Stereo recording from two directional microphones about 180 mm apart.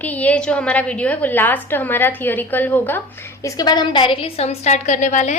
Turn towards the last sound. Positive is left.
turn(degrees=40)  # may be behind; listen again after turning